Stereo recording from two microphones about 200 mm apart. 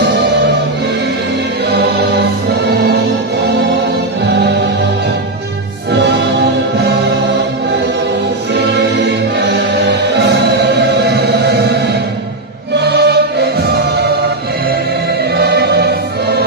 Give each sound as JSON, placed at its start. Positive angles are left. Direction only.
{"t": 1.7, "sound": "music", "side_deg": -55}
{"t": 5.9, "sound": "music", "side_deg": -60}
{"t": 8.5, "sound": "music", "side_deg": -55}
{"t": 12.7, "sound": "music", "side_deg": -55}
{"t": 15.3, "sound": "music", "side_deg": -55}